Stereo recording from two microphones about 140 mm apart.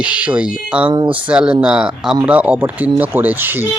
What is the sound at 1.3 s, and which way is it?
Speech, 5° right (ahead or behind).